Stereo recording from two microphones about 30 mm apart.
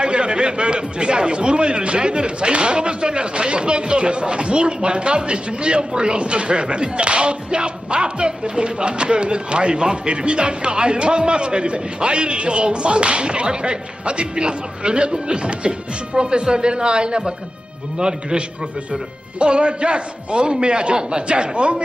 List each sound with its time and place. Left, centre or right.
0.0 s a man's voice: right
19.4 s a man's voice: right